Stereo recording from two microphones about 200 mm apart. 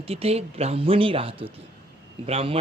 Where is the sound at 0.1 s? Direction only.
30° right (ahead or behind).